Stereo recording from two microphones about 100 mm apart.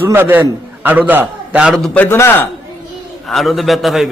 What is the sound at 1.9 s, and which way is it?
Speech, 25° left (ahead or behind).